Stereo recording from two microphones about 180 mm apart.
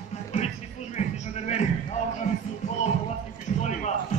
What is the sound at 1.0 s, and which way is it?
Music, 40° left (ahead or behind).